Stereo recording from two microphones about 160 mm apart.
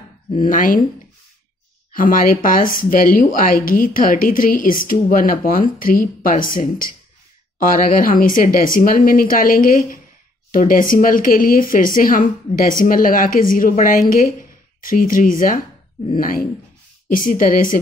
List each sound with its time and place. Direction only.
0.4 s a woman's voice: 60° left (ahead or behind)
1.9 s a woman's voice: 60° left (ahead or behind)